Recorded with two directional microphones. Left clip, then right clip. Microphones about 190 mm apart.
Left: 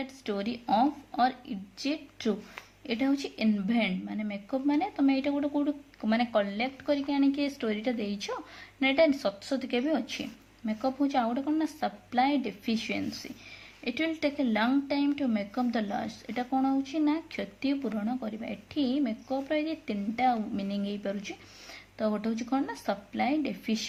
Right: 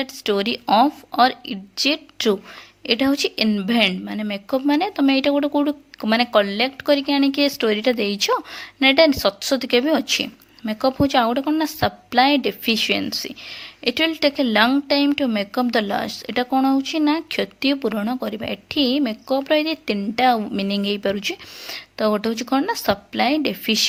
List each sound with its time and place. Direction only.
0.0 s a woman's voice: 45° right (ahead or behind)